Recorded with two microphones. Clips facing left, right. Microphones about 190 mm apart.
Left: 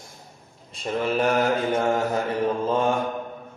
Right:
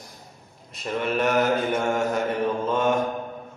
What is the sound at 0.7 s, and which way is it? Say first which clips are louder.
Mantra: left 1 dB; 30° left (ahead or behind).